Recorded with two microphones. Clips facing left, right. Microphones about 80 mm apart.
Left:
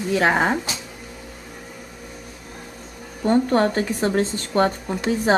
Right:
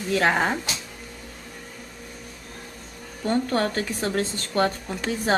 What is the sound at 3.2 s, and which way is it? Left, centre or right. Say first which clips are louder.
Speech: left 5 dB; centre.